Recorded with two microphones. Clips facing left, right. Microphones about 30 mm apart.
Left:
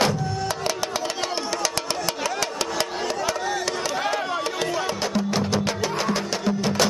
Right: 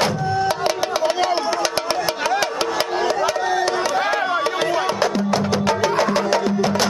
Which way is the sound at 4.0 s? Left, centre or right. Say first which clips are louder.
Right 5 dB; centre.